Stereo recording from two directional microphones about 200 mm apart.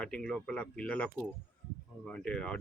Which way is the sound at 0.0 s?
5° left (ahead or behind).